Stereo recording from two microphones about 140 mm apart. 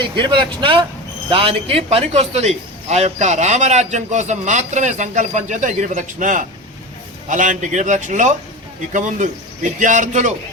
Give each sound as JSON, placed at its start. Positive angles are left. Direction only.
{"t": 0.0, "sound": "a man's voice", "side_deg": -35}